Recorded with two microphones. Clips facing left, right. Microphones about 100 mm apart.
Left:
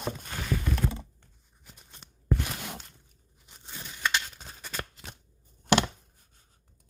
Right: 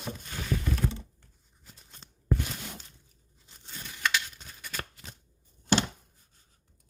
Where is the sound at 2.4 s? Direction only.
60° left (ahead or behind).